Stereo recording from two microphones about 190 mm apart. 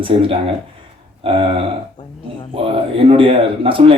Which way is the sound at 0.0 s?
30° right (ahead or behind).